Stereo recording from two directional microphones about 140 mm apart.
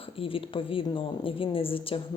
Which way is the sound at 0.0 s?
40° left (ahead or behind).